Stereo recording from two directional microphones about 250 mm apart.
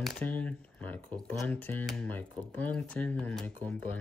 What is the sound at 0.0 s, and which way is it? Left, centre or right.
Speech, centre.